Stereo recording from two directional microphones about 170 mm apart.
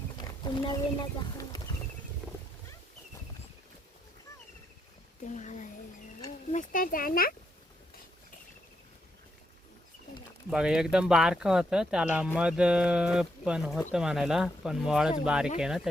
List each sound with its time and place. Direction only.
0.2 s wild animals: 25° left (ahead or behind)
5.2 s a sound: 45° left (ahead or behind)
6.5 s a child's voice: 50° left (ahead or behind)
10.5 s speech: 5° right (ahead or behind)